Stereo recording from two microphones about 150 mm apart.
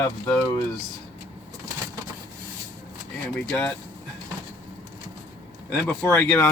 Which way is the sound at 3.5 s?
5° left (ahead or behind).